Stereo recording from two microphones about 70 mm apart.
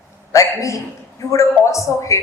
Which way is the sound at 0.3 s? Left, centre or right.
Left.